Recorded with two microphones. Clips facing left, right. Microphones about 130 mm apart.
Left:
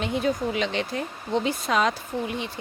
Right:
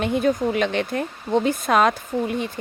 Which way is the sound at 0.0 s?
50° right (ahead or behind).